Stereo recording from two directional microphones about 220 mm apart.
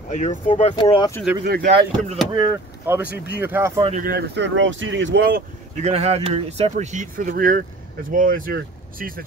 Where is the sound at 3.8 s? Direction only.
35° right (ahead or behind); by 5.2 s 55° right (ahead or behind).